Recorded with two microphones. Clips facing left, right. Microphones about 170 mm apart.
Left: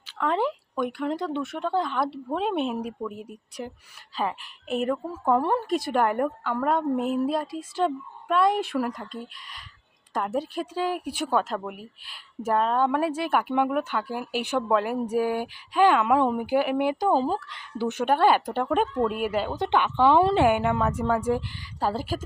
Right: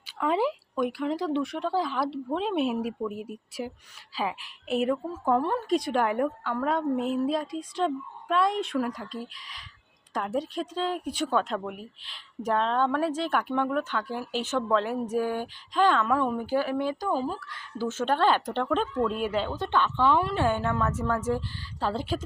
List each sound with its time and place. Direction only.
0.0 s speech: 10° right (ahead or behind)
5.3 s a woman's voice: 10° left (ahead or behind)
17.1 s speech: 30° left (ahead or behind)
17.6 s a woman's voice: 15° left (ahead or behind)